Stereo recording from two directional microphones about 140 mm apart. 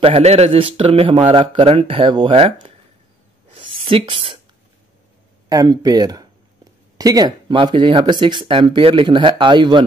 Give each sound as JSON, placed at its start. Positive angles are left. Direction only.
{"t": 0.0, "sound": "speech", "side_deg": -45}
{"t": 3.5, "sound": "a sound", "side_deg": -40}
{"t": 5.5, "sound": "speech", "side_deg": -25}